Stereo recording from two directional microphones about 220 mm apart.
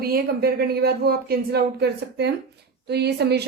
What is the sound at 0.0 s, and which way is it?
A woman's voice, 45° right (ahead or behind).